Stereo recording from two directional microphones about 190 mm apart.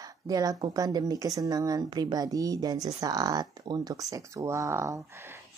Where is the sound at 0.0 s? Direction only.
20° right (ahead or behind).